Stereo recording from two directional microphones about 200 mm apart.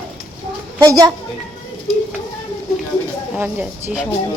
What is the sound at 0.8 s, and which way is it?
Speech, 20° right (ahead or behind).